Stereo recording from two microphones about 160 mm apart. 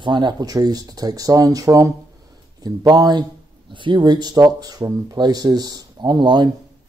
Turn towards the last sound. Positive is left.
turn(degrees=-25)  # may be behind; listen again after turning